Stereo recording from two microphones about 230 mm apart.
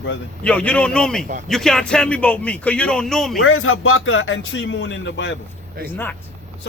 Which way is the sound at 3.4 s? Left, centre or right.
Left.